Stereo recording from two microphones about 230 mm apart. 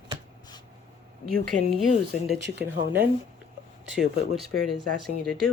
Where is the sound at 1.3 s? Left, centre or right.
Right.